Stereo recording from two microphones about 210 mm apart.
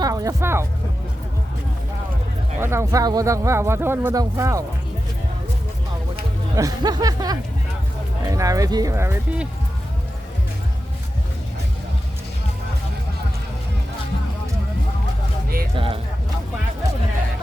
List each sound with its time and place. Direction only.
0.0 s speech: 15° right (ahead or behind)
2.6 s speech: 10° right (ahead or behind)
6.6 s speech: 20° right (ahead or behind)
15.7 s speech: 25° right (ahead or behind)